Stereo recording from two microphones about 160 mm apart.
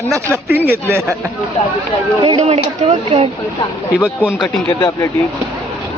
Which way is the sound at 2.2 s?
40° right (ahead or behind).